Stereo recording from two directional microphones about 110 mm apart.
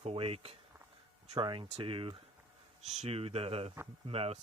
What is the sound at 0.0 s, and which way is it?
Speech, 60° right (ahead or behind).